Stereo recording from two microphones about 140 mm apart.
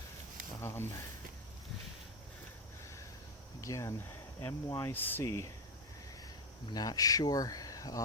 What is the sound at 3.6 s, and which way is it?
Speech, 20° left (ahead or behind).